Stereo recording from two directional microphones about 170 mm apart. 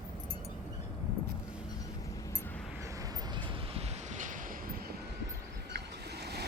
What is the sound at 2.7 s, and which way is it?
Train, 20° right (ahead or behind).